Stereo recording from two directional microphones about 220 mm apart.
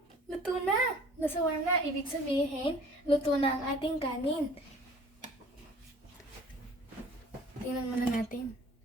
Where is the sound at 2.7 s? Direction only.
25° left (ahead or behind).